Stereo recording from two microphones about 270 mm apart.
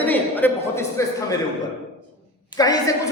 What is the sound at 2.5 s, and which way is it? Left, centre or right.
Speech, centre.